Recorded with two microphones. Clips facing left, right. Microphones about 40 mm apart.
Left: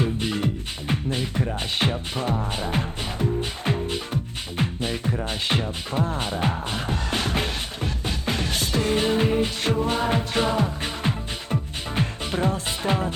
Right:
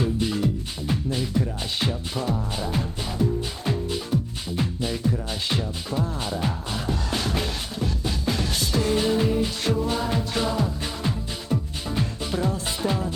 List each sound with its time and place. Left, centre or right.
0.0 s music: left